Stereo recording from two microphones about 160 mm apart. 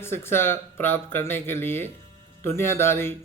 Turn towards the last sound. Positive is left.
turn(degrees=15)  # may be behind; listen again after turning